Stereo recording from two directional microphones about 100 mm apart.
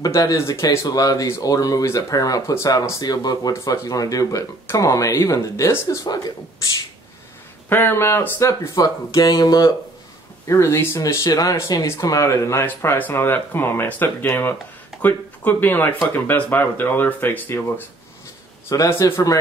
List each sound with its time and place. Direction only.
0.0 s speech: 35° left (ahead or behind)
7.7 s speech: 25° left (ahead or behind); by 9.7 s 40° left (ahead or behind)
10.5 s speech: 25° left (ahead or behind)
18.7 s speech: 30° left (ahead or behind)